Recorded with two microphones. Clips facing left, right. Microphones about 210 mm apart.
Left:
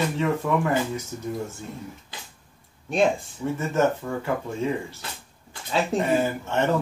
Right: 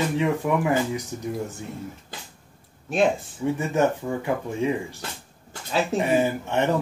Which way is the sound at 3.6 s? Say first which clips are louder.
Left 1 dB; 15° right (ahead or behind).